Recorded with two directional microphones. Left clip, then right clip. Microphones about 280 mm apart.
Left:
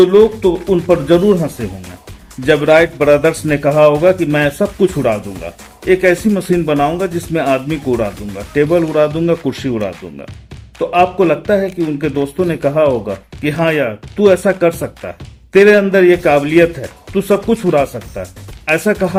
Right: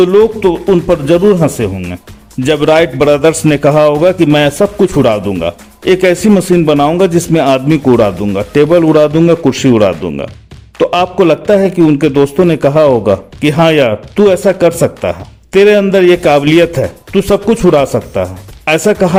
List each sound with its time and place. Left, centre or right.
0.0 s a man's voice: right
2.5 s a man's voice: right